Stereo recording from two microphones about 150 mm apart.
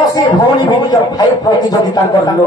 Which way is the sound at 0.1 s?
25° left (ahead or behind).